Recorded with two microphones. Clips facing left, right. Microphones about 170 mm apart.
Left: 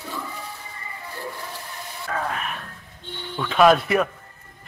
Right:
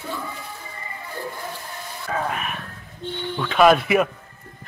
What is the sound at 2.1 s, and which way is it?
Music, 10° right (ahead or behind).